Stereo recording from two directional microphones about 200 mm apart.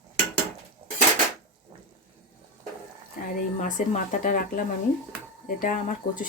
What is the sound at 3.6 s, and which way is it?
Speech, 40° left (ahead or behind).